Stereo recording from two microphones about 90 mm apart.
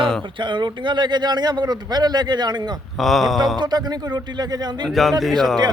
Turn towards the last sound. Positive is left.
turn(degrees=0)  # may be behind; listen again after turning